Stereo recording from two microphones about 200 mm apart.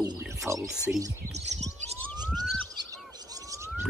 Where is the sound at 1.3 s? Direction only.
35° right (ahead or behind).